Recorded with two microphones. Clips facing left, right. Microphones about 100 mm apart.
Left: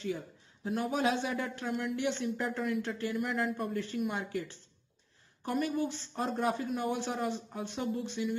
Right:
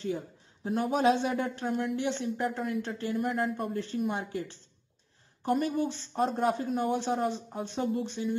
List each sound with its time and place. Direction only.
0.7 s speech: 35° right (ahead or behind)